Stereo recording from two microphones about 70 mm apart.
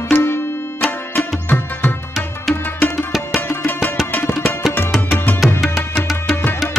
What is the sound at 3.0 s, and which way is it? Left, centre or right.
Music, centre.